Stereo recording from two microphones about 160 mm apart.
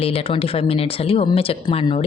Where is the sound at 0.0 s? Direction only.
35° left (ahead or behind).